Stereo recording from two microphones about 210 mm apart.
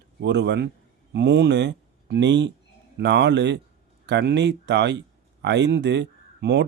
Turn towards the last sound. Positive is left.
turn(degrees=-55)  # may be behind; listen again after turning